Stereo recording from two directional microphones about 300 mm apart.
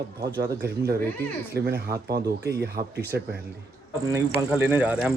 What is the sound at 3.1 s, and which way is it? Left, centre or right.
Speech, right.